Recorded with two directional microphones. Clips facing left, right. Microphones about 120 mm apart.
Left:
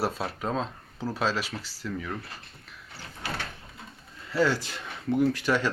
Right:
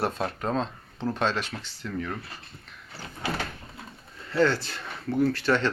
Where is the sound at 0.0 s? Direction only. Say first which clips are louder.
Right 1 dB; 5° left (ahead or behind).